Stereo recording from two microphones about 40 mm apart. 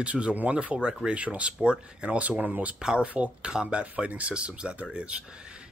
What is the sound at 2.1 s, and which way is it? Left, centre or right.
Speech, right.